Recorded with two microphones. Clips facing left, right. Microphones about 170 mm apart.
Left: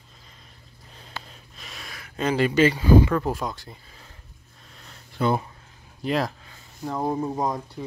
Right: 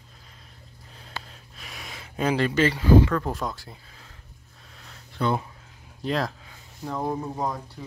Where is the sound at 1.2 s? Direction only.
5° right (ahead or behind); by 2.1 s 20° right (ahead or behind).